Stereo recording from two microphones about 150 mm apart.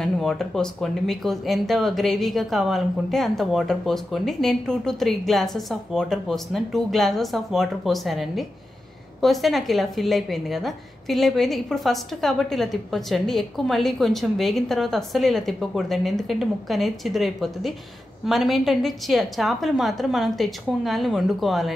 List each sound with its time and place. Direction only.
0.0 s a woman's voice: centre (ahead or behind)